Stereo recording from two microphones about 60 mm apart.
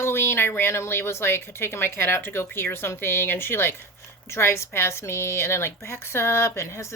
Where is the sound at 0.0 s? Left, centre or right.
Left.